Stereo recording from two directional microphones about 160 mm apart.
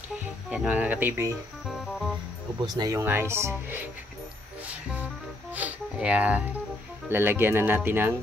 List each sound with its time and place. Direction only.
0.5 s speech: 10° right (ahead or behind)
2.6 s speech: 25° right (ahead or behind)
5.5 s speech: 10° right (ahead or behind)